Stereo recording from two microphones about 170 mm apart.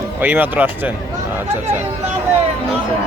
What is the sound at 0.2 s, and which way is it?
Speech, 10° right (ahead or behind).